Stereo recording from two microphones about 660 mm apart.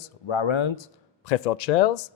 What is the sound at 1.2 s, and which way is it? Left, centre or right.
Speech, left.